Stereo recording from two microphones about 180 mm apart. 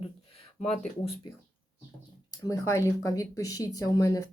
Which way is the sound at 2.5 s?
15° left (ahead or behind).